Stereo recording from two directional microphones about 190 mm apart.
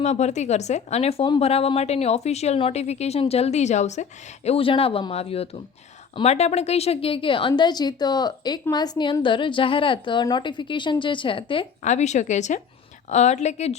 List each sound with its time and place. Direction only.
0.0 s a woman's voice: 35° left (ahead or behind)